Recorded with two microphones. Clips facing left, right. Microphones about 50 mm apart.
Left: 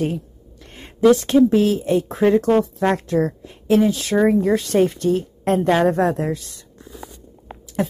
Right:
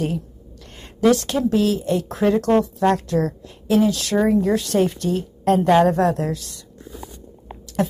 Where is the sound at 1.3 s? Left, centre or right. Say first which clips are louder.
Left 4 dB; left.